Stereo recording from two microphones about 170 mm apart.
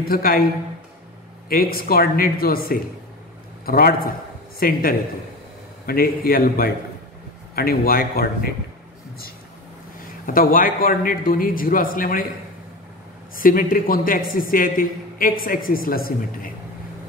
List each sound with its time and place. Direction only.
0.0 s a man's voice: 60° left (ahead or behind)
1.5 s a man's voice: 60° left (ahead or behind)
10.2 s a man's voice: 55° left (ahead or behind)
13.4 s a man's voice: 55° left (ahead or behind)